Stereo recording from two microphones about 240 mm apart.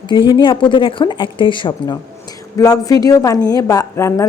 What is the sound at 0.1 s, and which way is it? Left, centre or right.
A woman's voice, centre.